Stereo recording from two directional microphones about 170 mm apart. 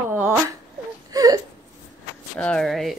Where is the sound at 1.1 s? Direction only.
20° right (ahead or behind).